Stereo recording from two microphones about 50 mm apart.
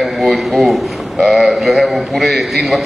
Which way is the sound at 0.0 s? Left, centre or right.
Centre.